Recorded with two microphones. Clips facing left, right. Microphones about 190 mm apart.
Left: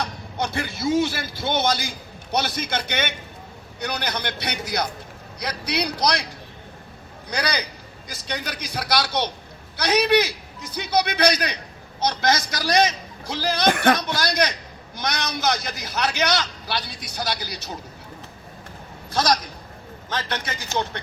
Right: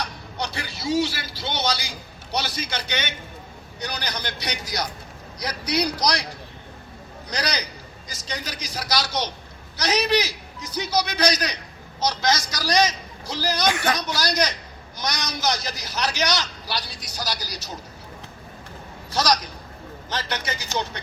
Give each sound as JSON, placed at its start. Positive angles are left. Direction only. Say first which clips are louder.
{"t": 0.0, "sound": "a man's voice", "louder": "left 3 dB", "side_deg": 50}
{"t": 7.3, "sound": "a man's voice", "louder": "left 2 dB", "side_deg": 55}
{"t": 19.1, "sound": "speech", "louder": "left 1 dB", "side_deg": 50}